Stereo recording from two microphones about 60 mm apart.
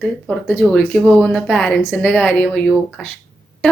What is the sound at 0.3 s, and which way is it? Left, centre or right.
A woman's voice, centre.